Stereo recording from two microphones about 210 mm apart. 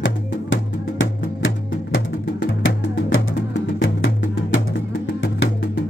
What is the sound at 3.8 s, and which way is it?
Music, 65° left (ahead or behind).